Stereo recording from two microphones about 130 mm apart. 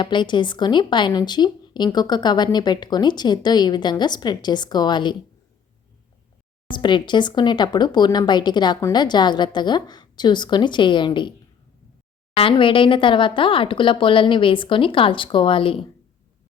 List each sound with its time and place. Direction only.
0.0 s a woman's voice: 35° left (ahead or behind)
6.7 s a woman's voice: 35° left (ahead or behind)
12.4 s a woman's voice: 40° left (ahead or behind)